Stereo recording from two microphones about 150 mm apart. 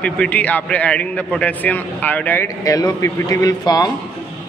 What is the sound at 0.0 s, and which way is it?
A man's voice, 10° left (ahead or behind).